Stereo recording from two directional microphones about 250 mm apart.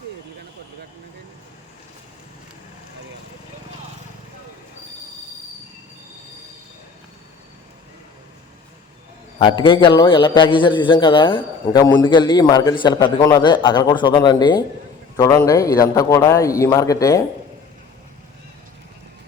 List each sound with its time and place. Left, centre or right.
9.4 s a man's voice: centre